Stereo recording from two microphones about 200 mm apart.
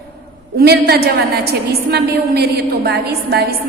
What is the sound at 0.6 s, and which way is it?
A woman's voice, 50° right (ahead or behind).